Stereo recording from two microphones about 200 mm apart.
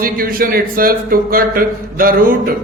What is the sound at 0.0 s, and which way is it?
Speech, 45° right (ahead or behind).